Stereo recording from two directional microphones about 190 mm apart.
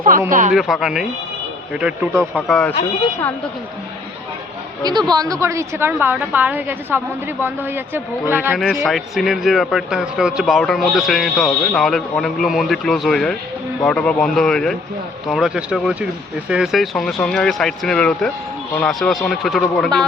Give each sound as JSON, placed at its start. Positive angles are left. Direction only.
{"t": 0.3, "sound": "speech", "side_deg": -45}
{"t": 0.5, "sound": "speech", "side_deg": 0}
{"t": 2.3, "sound": "speech", "side_deg": 5}
{"t": 4.8, "sound": "a woman's voice", "side_deg": -20}